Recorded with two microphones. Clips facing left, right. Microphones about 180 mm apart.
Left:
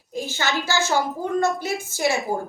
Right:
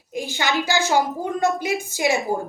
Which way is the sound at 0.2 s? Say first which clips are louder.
Right 2 dB; 15° right (ahead or behind).